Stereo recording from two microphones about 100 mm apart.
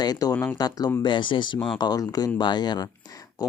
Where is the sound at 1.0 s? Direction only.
50° left (ahead or behind).